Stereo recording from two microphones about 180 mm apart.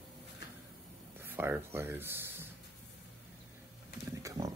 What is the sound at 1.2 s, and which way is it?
Speech, 10° right (ahead or behind).